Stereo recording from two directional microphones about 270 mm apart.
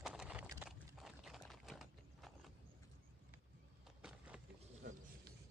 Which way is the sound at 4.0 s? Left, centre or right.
Centre.